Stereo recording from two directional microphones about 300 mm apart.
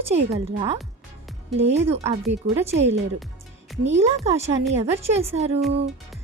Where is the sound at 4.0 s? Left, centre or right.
Right.